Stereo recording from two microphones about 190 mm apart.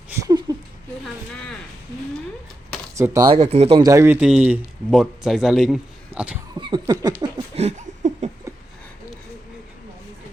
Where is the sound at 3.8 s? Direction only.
15° right (ahead or behind).